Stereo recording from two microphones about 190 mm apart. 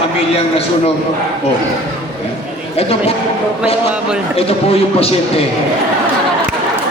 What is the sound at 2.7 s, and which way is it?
Speech, 30° left (ahead or behind).